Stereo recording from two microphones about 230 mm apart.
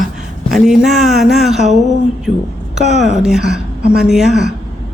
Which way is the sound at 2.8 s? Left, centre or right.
Centre.